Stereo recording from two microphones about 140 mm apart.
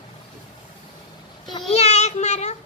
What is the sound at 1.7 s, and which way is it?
Child singing, 50° left (ahead or behind).